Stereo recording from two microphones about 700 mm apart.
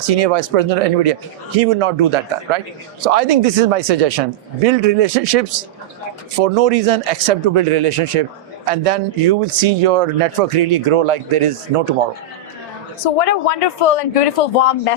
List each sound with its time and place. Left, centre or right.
0.0 s speech: right
13.1 s speech: left